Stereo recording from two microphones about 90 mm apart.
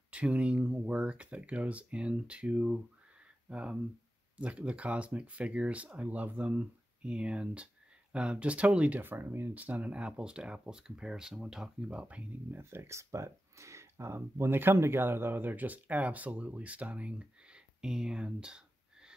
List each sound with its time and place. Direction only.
0.1 s speech: 15° right (ahead or behind)
12.4 s speech: 25° right (ahead or behind); by 18.6 s 10° right (ahead or behind)